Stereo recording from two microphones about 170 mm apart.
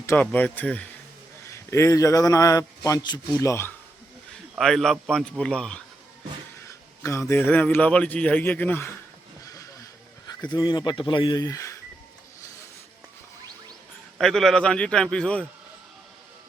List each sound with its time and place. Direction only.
0.0 s a man's voice: 15° left (ahead or behind)
4.5 s a man's voice: centre (ahead or behind)
6.7 s a man's voice: 15° left (ahead or behind)
9.5 s vehicle: 20° left (ahead or behind)
10.2 s speech: 25° left (ahead or behind)
14.2 s a man's voice: centre (ahead or behind)